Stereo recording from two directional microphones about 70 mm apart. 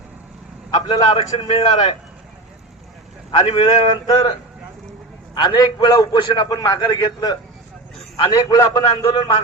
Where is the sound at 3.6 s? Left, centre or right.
Left.